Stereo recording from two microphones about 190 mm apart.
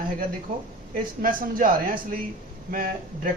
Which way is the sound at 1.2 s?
45° right (ahead or behind).